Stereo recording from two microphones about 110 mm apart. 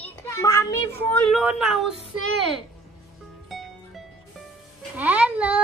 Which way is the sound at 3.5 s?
Centre (ahead or behind).